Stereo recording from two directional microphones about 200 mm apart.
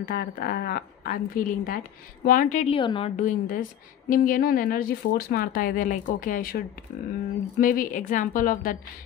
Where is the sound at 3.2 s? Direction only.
40° left (ahead or behind).